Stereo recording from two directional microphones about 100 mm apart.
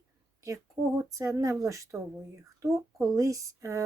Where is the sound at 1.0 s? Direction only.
30° right (ahead or behind).